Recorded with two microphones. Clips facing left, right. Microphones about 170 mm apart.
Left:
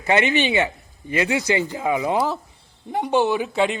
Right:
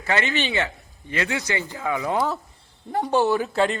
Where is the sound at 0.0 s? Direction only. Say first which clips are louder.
Left 5 dB; 20° left (ahead or behind).